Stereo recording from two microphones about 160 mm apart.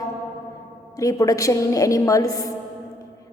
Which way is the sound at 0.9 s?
20° left (ahead or behind).